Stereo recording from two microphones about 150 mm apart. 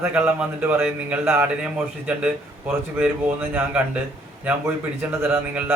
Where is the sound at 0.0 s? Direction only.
10° right (ahead or behind).